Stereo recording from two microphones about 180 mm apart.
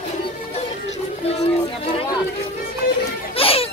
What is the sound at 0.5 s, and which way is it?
Music, 35° left (ahead or behind).